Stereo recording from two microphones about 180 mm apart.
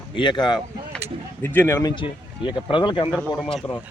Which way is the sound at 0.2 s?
25° left (ahead or behind).